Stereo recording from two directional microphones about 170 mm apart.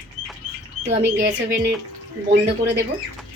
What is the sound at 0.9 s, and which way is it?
Speech, 15° right (ahead or behind).